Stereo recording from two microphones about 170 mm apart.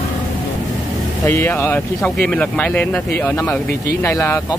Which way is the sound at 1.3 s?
15° left (ahead or behind).